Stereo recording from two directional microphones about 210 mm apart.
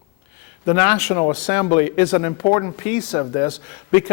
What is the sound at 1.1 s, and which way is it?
Speech, 25° left (ahead or behind).